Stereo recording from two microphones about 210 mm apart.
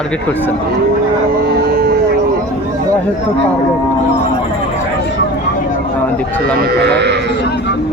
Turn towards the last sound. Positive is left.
turn(degrees=-55)  # may be behind; listen again after turning